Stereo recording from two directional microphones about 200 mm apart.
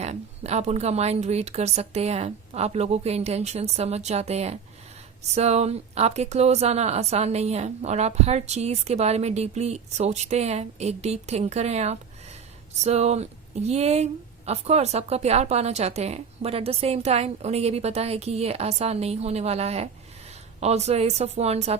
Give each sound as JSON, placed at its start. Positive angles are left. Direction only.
{"t": 0.0, "sound": "a woman's voice", "side_deg": -35}